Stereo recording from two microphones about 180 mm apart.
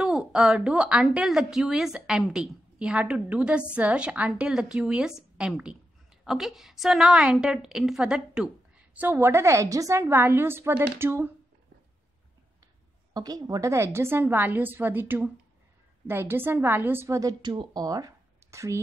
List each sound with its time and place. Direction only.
0.0 s a woman's voice: 5° right (ahead or behind)
13.1 s a woman's voice: 20° right (ahead or behind)